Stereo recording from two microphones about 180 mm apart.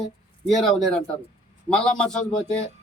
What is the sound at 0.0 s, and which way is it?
A man's voice, centre (ahead or behind).